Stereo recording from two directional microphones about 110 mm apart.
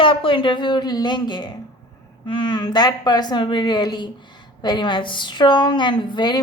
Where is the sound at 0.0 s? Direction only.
55° left (ahead or behind).